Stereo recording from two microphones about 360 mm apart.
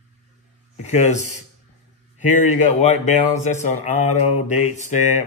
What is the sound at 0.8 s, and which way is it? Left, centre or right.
Speech, centre.